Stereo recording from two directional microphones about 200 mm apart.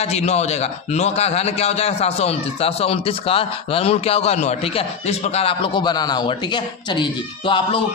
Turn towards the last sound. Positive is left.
turn(degrees=25)  # may be behind; listen again after turning